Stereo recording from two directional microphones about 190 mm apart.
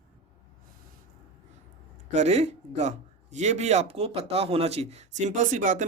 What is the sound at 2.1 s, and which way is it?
Speech, 35° right (ahead or behind).